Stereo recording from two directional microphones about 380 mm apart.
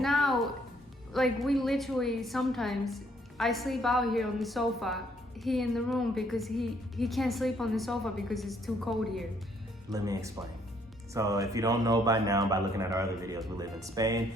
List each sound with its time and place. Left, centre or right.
0.0 s music: centre
1.1 s a woman's voice: centre